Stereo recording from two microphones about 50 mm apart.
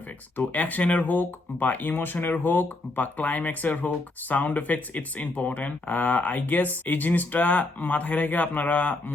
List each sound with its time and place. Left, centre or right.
0.3 s speech: left